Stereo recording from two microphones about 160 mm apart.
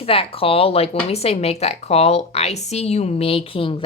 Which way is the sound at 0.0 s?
35° left (ahead or behind).